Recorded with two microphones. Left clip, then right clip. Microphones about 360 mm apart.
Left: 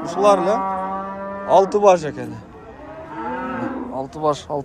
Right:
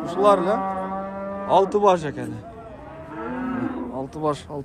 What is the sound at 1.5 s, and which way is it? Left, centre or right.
Speech, centre.